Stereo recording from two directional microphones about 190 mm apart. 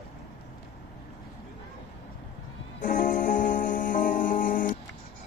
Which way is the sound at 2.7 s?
45° left (ahead or behind).